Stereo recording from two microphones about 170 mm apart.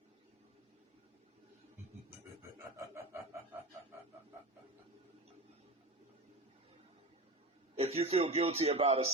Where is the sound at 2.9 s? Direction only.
15° right (ahead or behind).